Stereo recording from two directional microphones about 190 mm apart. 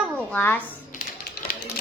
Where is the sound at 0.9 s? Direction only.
50° left (ahead or behind).